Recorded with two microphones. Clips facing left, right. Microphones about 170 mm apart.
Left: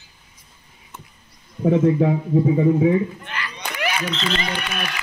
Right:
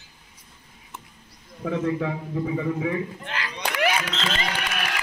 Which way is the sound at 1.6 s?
25° left (ahead or behind).